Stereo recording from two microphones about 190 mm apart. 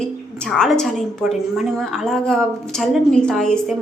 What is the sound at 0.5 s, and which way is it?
A woman's voice, 5° left (ahead or behind).